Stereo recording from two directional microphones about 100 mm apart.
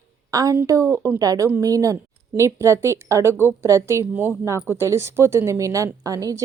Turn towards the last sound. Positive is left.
turn(degrees=-35)  # may be behind; listen again after turning